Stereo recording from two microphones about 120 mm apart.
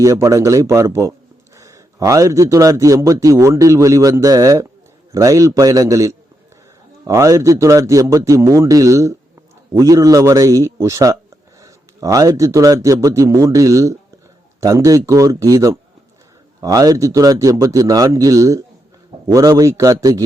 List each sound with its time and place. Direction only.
0.0 s a man's voice: 25° right (ahead or behind)